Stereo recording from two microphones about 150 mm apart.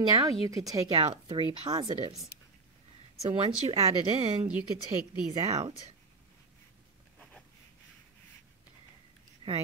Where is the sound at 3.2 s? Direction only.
45° right (ahead or behind).